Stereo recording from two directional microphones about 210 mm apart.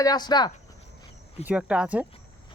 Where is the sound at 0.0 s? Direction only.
20° left (ahead or behind).